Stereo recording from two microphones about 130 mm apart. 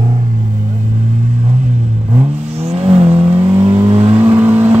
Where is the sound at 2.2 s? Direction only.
55° right (ahead or behind).